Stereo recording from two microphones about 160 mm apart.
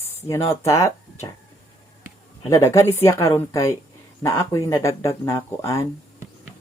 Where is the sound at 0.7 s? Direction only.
20° left (ahead or behind).